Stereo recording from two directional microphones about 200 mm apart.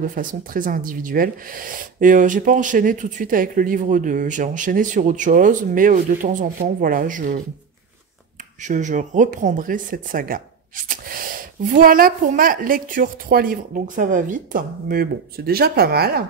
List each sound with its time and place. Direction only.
0.0 s speech: 40° right (ahead or behind)
8.6 s speech: 40° right (ahead or behind)